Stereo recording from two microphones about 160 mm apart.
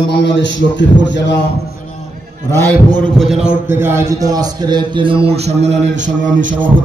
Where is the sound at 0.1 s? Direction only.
90° left.